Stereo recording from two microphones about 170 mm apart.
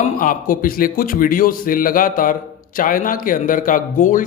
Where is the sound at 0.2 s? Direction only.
55° left (ahead or behind).